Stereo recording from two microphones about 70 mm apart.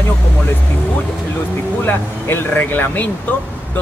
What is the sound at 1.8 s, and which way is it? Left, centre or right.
Speech, left.